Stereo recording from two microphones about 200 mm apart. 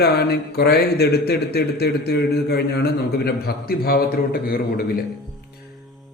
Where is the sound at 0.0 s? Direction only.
55° left (ahead or behind).